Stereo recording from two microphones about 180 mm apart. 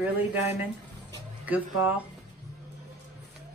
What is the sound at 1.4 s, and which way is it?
Speech, 10° right (ahead or behind).